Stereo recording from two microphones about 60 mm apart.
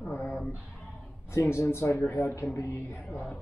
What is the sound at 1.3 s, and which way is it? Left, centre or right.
Speech, left.